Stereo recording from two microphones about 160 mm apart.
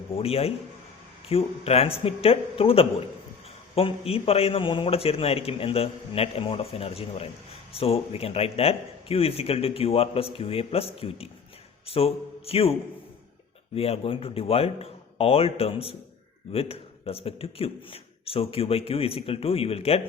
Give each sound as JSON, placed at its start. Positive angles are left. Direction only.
{"t": 0.2, "sound": "speech", "side_deg": 40}
{"t": 13.7, "sound": "speech", "side_deg": 35}